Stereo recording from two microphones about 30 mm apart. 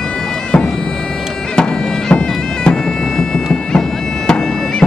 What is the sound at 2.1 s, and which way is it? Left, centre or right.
Bagpipes, left.